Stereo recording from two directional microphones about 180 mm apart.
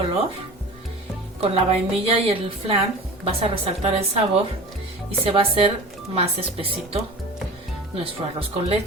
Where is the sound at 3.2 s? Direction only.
35° right (ahead or behind).